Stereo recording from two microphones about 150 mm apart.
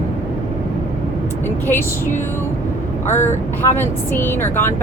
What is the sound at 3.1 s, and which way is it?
Speech, 15° left (ahead or behind).